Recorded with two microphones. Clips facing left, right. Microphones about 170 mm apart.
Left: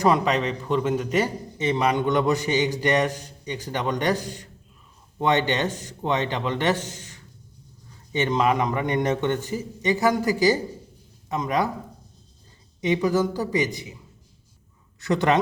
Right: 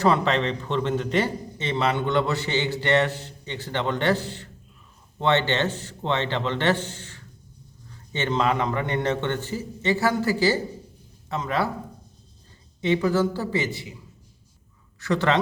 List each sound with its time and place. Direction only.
0.0 s a man's voice: 10° left (ahead or behind)
12.8 s a man's voice: 15° left (ahead or behind)
15.0 s a man's voice: 20° left (ahead or behind)